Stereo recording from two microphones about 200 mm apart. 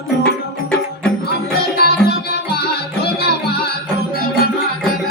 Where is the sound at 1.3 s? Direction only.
50° left (ahead or behind).